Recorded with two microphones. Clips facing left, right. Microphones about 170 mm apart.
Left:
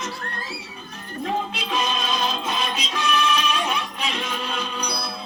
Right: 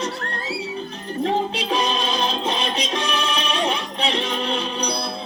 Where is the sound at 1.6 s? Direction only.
30° right (ahead or behind).